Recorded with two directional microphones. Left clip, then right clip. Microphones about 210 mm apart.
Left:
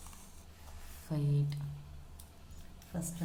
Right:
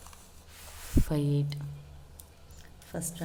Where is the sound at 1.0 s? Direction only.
35° right (ahead or behind).